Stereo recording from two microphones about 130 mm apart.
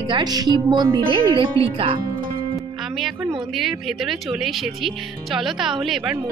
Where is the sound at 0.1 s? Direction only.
30° right (ahead or behind).